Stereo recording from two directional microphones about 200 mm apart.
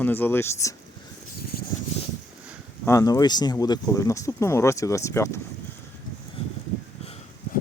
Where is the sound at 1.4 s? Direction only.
50° left (ahead or behind).